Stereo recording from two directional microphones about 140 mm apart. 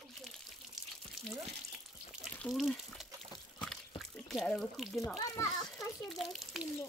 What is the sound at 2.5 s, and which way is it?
Water, centre (ahead or behind).